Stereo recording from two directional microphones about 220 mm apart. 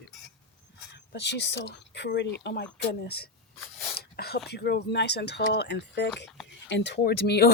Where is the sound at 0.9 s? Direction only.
50° left (ahead or behind).